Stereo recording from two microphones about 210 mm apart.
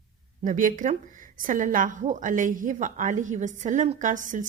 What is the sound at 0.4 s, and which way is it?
A woman's voice, 40° right (ahead or behind).